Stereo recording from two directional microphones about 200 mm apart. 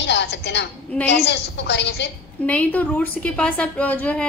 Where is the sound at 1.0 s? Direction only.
60° left (ahead or behind).